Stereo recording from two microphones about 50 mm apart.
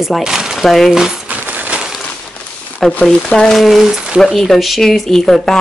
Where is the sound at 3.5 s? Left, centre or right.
Centre.